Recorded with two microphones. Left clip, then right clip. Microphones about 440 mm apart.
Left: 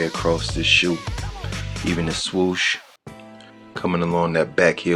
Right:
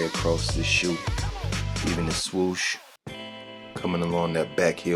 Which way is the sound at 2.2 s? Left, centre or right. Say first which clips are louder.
Left 8 dB; right.